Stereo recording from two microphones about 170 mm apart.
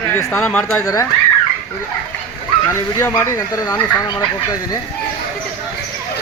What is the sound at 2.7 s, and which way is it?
Speech, 15° left (ahead or behind).